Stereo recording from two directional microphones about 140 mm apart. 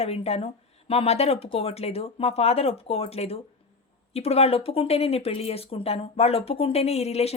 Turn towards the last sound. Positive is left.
turn(degrees=50)  # may be behind; listen again after turning